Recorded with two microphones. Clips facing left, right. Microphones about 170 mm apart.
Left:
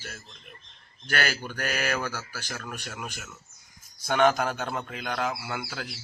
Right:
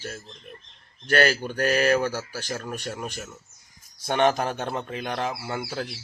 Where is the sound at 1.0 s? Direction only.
35° right (ahead or behind).